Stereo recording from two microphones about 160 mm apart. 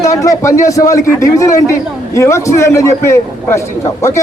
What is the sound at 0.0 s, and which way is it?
A man's voice, 20° left (ahead or behind).